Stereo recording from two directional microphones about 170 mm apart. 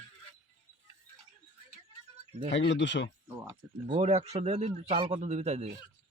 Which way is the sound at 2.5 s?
90° left.